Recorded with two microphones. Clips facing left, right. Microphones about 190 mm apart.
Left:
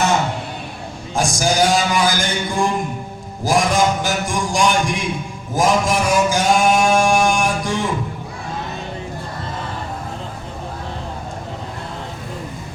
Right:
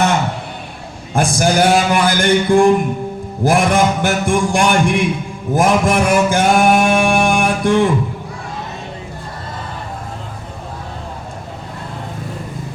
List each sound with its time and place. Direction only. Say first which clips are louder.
1.1 s mantra: right 4 dB; 55° right (ahead or behind)